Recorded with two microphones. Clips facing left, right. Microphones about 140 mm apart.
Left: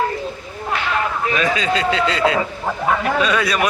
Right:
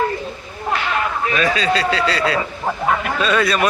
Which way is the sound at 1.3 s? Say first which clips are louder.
Right 2 dB; 20° left (ahead or behind).